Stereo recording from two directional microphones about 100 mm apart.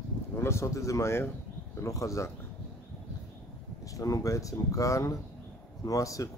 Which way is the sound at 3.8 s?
35° left (ahead or behind).